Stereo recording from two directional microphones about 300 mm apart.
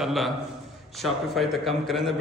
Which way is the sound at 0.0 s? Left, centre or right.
Centre.